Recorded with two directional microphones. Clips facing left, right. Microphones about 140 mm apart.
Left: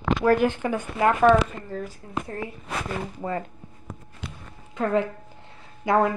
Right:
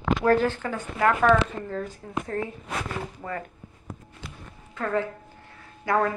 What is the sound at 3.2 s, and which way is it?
Speech, 25° left (ahead or behind).